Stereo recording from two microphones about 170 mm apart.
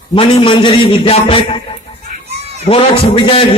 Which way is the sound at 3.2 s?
30° left (ahead or behind).